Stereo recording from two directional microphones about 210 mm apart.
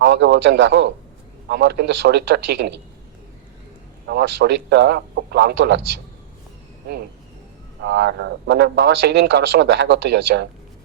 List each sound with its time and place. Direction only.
0.0 s a man's voice: 55° right (ahead or behind)
4.0 s a man's voice: 55° right (ahead or behind)
7.8 s speech: 55° right (ahead or behind)